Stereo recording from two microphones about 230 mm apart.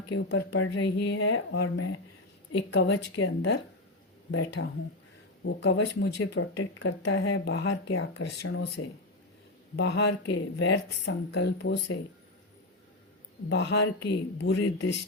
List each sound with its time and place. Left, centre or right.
0.1 s speech: left
13.5 s speech: left